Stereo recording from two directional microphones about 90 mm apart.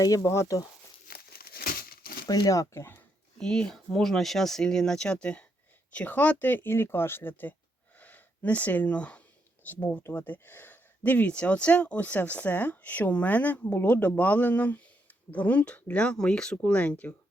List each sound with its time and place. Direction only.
0.2 s speech: 30° left (ahead or behind)
2.2 s speech: 50° left (ahead or behind)
3.3 s speech: 10° left (ahead or behind)
7.9 s a sound: 20° left (ahead or behind)
9.6 s speech: 20° left (ahead or behind)